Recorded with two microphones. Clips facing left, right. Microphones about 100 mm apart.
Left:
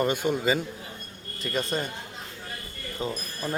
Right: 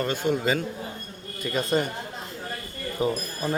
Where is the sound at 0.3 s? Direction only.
5° left (ahead or behind).